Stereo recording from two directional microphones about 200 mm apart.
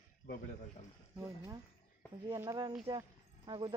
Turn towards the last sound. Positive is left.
turn(degrees=-20)  # may be behind; listen again after turning